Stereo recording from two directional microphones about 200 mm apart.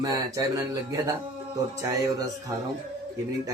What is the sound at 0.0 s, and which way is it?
Speech, 20° right (ahead or behind).